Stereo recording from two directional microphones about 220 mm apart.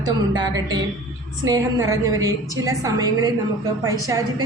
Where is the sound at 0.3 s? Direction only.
20° right (ahead or behind).